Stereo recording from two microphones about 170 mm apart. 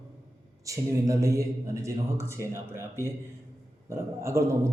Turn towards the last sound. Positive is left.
turn(degrees=-15)  # may be behind; listen again after turning